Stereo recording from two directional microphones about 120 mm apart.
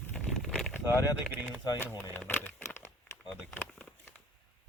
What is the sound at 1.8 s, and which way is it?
Speech, 15° left (ahead or behind).